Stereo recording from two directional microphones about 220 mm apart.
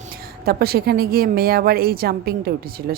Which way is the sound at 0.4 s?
45° right (ahead or behind).